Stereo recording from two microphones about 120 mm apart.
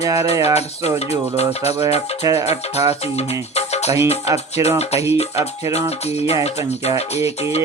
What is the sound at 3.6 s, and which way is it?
Music, 65° left (ahead or behind).